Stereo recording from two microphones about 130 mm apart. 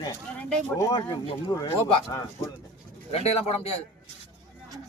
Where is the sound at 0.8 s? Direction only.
30° left (ahead or behind).